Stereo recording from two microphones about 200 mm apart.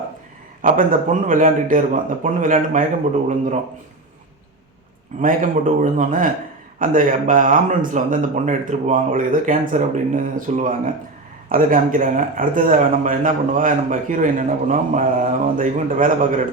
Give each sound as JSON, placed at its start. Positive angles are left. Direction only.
{"t": 0.6, "sound": "speech", "side_deg": -45}
{"t": 5.2, "sound": "speech", "side_deg": -40}